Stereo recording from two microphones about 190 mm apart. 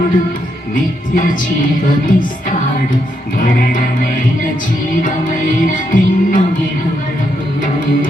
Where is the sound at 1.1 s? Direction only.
45° left (ahead or behind).